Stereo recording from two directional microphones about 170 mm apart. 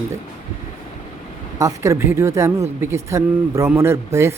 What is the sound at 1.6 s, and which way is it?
Speech, 15° right (ahead or behind).